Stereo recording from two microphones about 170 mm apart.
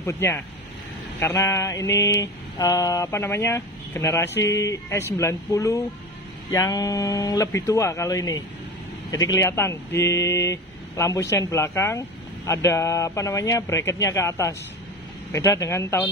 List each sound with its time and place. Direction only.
0.0 s mantra: 15° left (ahead or behind)
6.5 s speech: 20° left (ahead or behind)
9.1 s mantra: 20° left (ahead or behind)